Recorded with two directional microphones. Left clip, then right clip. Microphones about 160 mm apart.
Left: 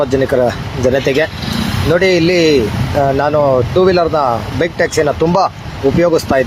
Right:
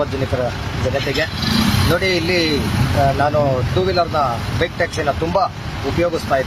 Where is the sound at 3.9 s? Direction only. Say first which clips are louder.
Left 6 dB; 40° left (ahead or behind).